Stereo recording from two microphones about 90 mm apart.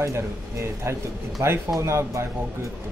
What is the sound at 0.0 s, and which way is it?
Speech, 30° right (ahead or behind).